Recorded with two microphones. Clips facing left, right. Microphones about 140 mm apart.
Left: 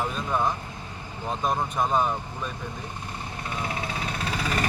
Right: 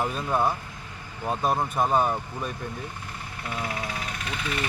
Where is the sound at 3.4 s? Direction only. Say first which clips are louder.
Right 1 dB; 25° left (ahead or behind).